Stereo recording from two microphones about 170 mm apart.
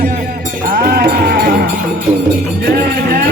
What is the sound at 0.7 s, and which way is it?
Sheep, 65° right (ahead or behind).